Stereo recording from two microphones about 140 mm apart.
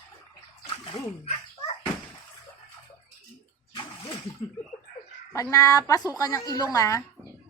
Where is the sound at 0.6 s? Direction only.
40° left (ahead or behind).